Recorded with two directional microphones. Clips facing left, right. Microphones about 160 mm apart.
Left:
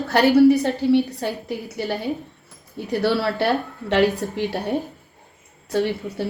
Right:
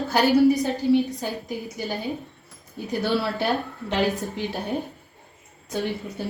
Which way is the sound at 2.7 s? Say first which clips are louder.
Left 3 dB; 65° left (ahead or behind).